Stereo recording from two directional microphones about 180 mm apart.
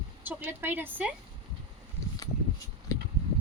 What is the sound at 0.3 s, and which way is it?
Speech, 10° right (ahead or behind).